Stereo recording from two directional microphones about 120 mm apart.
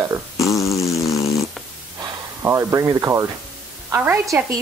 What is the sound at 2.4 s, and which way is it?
A woman's voice, 25° right (ahead or behind).